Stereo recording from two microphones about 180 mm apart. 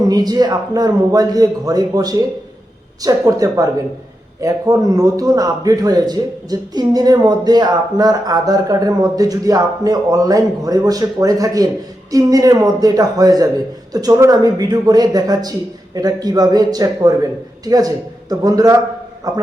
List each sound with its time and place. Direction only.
0.0 s a man's voice: 20° right (ahead or behind)